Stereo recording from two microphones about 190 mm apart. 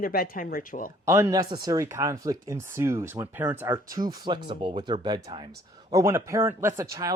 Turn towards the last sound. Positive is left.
turn(degrees=-15)  # may be behind; listen again after turning